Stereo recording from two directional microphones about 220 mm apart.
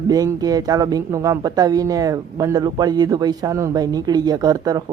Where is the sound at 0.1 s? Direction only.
15° right (ahead or behind).